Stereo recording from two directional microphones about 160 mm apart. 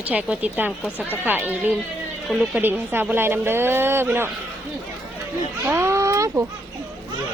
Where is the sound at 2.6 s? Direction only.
15° right (ahead or behind).